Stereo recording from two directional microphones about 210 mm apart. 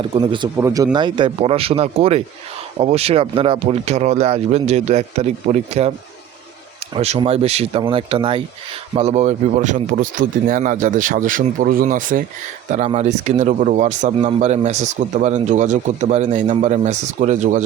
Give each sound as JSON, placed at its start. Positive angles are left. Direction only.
{"t": 0.0, "sound": "a man's voice", "side_deg": -25}
{"t": 6.9, "sound": "a man's voice", "side_deg": -30}